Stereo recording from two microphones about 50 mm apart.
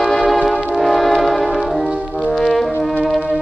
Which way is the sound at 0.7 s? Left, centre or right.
Centre.